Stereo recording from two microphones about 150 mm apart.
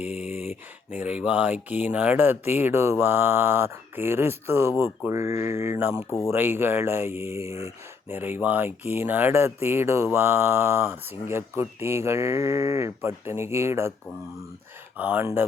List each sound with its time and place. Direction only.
0.0 s mantra: 10° right (ahead or behind)
14.9 s mantra: 10° right (ahead or behind)